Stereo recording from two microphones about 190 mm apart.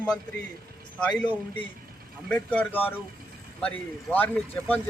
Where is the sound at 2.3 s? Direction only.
5° left (ahead or behind).